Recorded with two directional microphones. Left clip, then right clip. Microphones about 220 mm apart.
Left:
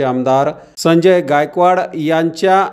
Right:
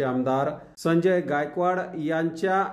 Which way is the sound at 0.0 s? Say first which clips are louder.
Left 11 dB; 35° left (ahead or behind).